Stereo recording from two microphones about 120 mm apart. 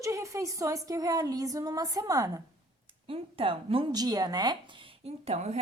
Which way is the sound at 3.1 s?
50° right (ahead or behind).